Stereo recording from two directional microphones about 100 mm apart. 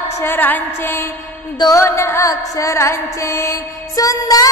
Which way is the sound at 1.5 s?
40° left (ahead or behind).